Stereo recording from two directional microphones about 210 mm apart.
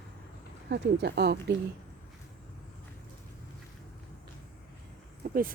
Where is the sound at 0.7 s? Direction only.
50° right (ahead or behind).